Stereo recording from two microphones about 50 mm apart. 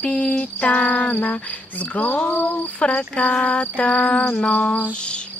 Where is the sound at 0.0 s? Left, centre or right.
Left.